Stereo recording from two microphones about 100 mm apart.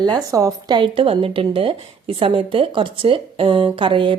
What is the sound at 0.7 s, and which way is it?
Speech, 55° right (ahead or behind).